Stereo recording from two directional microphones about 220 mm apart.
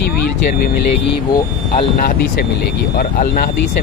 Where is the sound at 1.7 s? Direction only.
35° left (ahead or behind).